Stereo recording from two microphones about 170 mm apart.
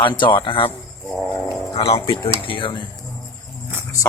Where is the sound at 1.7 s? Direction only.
35° left (ahead or behind).